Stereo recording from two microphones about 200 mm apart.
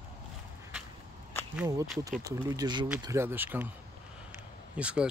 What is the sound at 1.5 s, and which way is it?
Speech, 5° right (ahead or behind).